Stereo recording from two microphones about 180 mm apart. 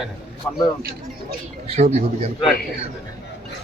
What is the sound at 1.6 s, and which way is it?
Speech, 35° right (ahead or behind).